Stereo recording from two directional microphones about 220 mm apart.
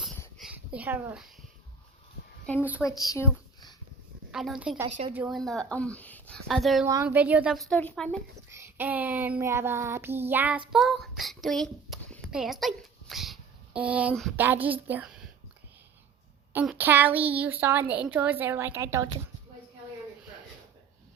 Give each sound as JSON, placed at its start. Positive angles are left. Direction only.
{"t": 0.3, "sound": "a sound", "side_deg": -5}
{"t": 2.6, "sound": "a woman's voice", "side_deg": -5}
{"t": 3.1, "sound": "a sound", "side_deg": 15}
{"t": 4.3, "sound": "a woman's voice", "side_deg": 0}
{"t": 4.9, "sound": "speech", "side_deg": -30}
{"t": 5.1, "sound": "a woman's voice", "side_deg": -5}
{"t": 6.8, "sound": "a woman's voice", "side_deg": -10}
{"t": 8.4, "sound": "a woman's voice", "side_deg": -10}
{"t": 16.5, "sound": "a woman's voice", "side_deg": -10}